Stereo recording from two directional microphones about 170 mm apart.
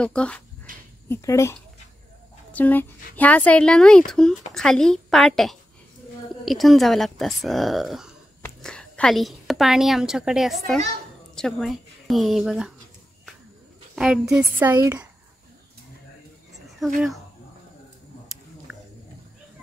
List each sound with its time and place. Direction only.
0.0 s a woman's voice: 5° left (ahead or behind)
13.9 s speech: 5° right (ahead or behind)
18.7 s a sound: 5° right (ahead or behind)